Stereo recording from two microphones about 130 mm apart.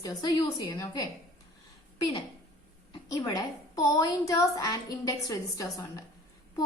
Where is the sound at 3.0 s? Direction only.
30° left (ahead or behind).